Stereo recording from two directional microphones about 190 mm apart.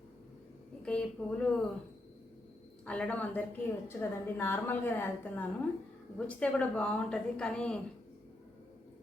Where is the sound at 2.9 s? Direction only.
5° left (ahead or behind).